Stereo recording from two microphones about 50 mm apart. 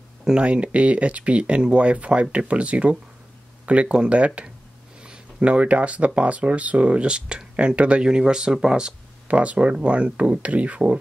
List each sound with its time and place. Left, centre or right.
0.2 s speech: centre
9.3 s speech: right